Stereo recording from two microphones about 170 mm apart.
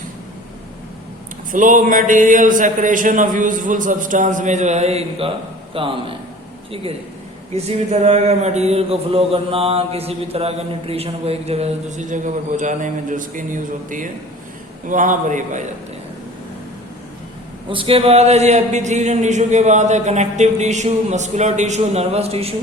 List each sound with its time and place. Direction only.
1.5 s a man's voice: 50° right (ahead or behind); by 6.1 s 30° right (ahead or behind)
7.5 s a man's voice: 40° right (ahead or behind)
17.7 s speech: 30° right (ahead or behind)